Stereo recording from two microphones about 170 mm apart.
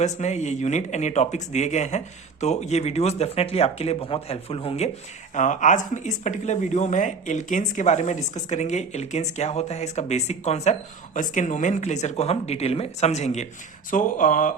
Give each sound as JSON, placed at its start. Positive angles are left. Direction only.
{"t": 0.0, "sound": "speech", "side_deg": 45}
{"t": 5.3, "sound": "speech", "side_deg": 45}